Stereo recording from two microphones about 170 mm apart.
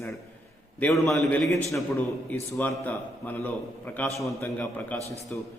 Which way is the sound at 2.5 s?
10° left (ahead or behind).